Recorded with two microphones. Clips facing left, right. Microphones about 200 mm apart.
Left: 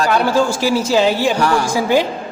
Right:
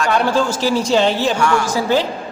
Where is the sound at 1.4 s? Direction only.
35° left (ahead or behind).